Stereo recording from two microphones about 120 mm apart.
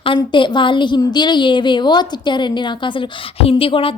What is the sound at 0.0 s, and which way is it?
A woman's voice, 45° left (ahead or behind).